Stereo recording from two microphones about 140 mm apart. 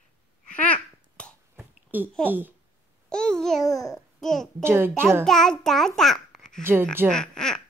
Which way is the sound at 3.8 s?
5° left (ahead or behind).